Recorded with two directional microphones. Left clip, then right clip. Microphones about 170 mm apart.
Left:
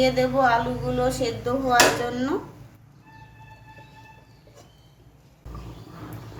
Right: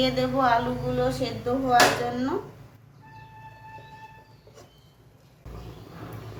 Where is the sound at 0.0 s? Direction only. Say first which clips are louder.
Left 3 dB; 25° left (ahead or behind).